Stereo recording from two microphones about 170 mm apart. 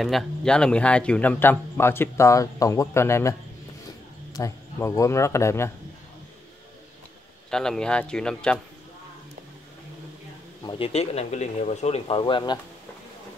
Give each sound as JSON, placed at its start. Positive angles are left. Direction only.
{"t": 0.0, "sound": "speech", "side_deg": 0}
{"t": 7.5, "sound": "speech", "side_deg": 5}
{"t": 10.6, "sound": "speech", "side_deg": 30}